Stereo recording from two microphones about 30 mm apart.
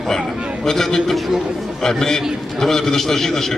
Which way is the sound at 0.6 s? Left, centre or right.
Centre.